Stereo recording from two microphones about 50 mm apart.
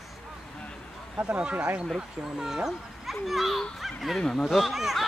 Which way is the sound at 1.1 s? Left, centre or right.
Right.